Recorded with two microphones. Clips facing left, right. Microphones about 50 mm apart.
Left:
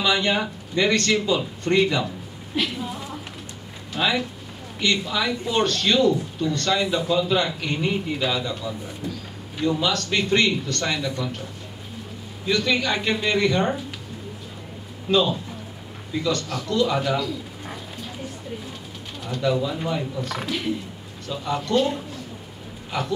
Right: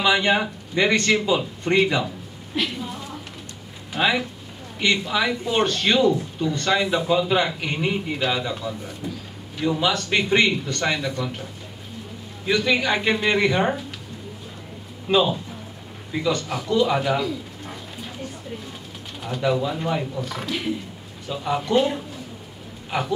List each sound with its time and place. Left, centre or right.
0.0 s speech: centre
2.5 s speech: centre
3.9 s speech: centre
12.4 s speech: centre
15.0 s speech: centre
19.2 s speech: centre
21.3 s speech: centre